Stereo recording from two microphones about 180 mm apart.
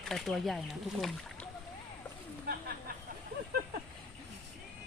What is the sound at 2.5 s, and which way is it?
Speech, 55° right (ahead or behind).